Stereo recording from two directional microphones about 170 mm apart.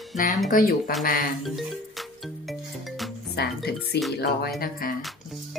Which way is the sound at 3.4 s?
70° left (ahead or behind).